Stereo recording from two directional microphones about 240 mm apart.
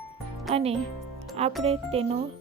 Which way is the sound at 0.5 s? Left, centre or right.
Right.